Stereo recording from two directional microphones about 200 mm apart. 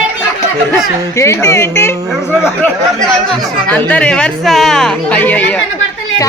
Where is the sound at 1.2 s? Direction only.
15° left (ahead or behind).